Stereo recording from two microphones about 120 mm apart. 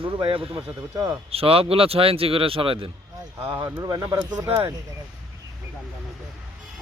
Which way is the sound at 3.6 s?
30° right (ahead or behind).